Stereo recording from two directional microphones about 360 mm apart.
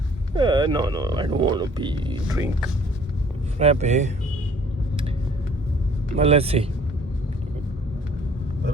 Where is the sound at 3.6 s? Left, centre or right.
Centre.